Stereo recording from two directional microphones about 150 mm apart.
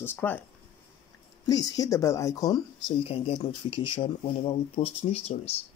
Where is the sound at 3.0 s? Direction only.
40° left (ahead or behind).